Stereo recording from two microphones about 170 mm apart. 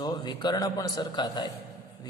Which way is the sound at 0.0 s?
25° left (ahead or behind).